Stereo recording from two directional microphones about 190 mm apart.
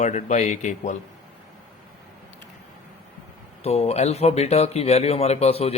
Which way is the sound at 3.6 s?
35° left (ahead or behind).